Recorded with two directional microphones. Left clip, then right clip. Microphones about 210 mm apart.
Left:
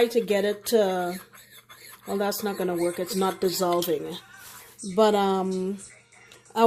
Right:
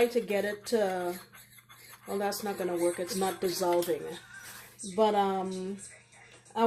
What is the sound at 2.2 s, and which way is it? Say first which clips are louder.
Speech: left 5 dB; 45° left (ahead or behind).